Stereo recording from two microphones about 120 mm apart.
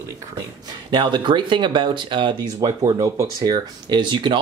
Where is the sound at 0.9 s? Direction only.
40° right (ahead or behind).